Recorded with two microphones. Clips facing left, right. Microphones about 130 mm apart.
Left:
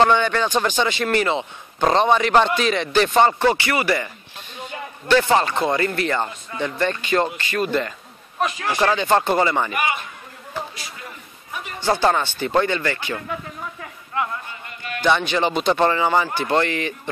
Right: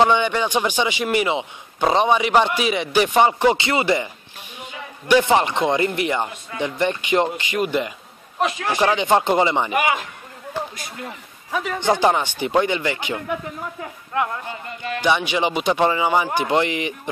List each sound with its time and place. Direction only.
0.0 s a man's voice: 15° right (ahead or behind)
9.8 s a man's voice: 90° right
11.8 s a man's voice: 15° right (ahead or behind)
15.0 s a man's voice: 10° right (ahead or behind)